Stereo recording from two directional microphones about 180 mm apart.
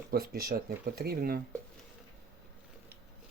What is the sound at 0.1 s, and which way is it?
Speech, 55° right (ahead or behind).